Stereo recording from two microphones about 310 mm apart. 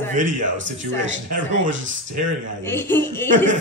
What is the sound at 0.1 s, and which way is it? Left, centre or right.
Speech, right.